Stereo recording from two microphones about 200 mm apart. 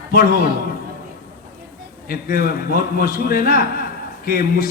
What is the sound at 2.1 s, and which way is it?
A man's voice, 50° left (ahead or behind).